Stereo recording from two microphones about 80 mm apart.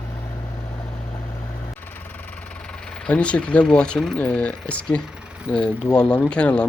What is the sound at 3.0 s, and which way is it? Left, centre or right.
Speech, centre.